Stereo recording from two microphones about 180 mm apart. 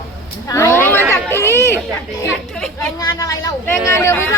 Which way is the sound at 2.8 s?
20° left (ahead or behind).